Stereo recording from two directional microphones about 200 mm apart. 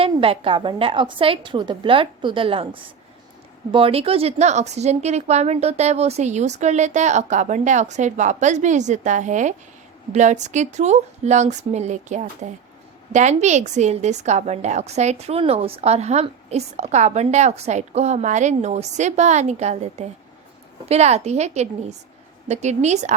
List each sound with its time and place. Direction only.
0.0 s a woman's voice: 25° right (ahead or behind)